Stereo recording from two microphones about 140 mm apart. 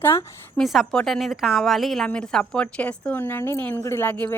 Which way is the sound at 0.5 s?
Centre (ahead or behind).